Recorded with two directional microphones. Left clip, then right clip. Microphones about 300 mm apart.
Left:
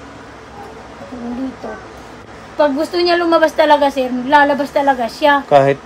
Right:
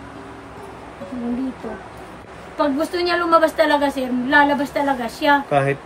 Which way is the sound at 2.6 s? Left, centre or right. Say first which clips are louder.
Left 6 dB; centre.